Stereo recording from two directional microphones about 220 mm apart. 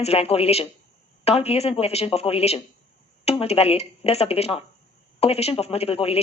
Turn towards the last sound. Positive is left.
turn(degrees=25)  # may be behind; listen again after turning